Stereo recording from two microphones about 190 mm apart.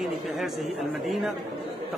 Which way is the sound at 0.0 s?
Centre (ahead or behind).